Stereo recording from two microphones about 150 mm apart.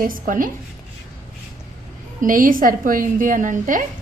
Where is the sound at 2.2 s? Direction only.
65° right (ahead or behind).